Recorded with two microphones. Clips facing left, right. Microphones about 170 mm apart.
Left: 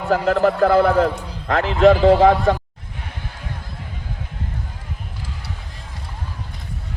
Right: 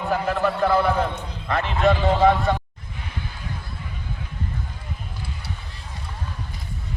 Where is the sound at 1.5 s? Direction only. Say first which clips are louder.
Left 7 dB; 90° left.